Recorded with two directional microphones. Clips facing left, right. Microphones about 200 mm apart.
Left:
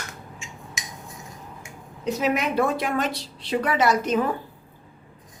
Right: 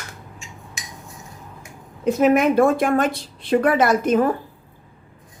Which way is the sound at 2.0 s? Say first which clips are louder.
Right 8 dB; 50° right (ahead or behind).